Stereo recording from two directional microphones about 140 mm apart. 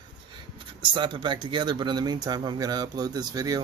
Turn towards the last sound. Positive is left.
turn(degrees=-25)  # may be behind; listen again after turning